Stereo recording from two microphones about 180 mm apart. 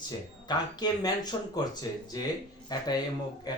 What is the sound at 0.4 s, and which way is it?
Speech, 25° left (ahead or behind).